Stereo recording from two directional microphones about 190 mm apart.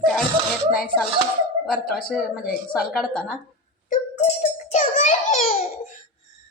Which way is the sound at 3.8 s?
35° left (ahead or behind).